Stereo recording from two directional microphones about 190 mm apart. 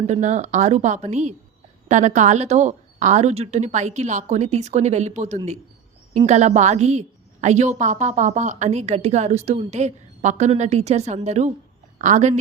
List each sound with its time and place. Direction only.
0.1 s a woman's voice: 40° right (ahead or behind)